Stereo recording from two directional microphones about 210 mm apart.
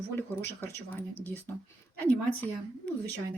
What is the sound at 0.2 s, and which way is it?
Speech, 10° left (ahead or behind).